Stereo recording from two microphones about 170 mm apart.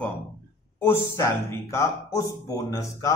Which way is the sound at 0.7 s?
15° left (ahead or behind).